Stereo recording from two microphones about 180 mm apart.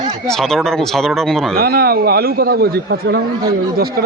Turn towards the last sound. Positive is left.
turn(degrees=-65)  # may be behind; listen again after turning